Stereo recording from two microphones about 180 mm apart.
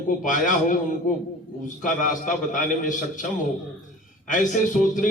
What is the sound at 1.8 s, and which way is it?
Speech, 45° left (ahead or behind).